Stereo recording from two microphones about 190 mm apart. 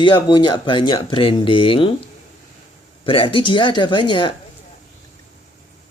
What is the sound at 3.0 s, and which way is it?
Speech, 30° left (ahead or behind).